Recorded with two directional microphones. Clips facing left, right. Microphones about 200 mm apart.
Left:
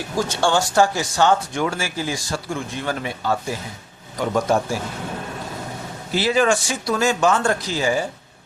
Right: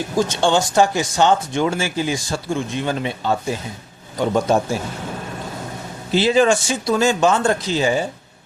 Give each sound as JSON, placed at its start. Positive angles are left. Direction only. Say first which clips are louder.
{"t": 0.2, "sound": "speech", "louder": "right 2 dB", "side_deg": -20}
{"t": 6.1, "sound": "speech", "louder": "right 3 dB", "side_deg": -25}